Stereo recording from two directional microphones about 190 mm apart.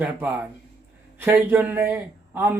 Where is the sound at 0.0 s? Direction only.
10° right (ahead or behind).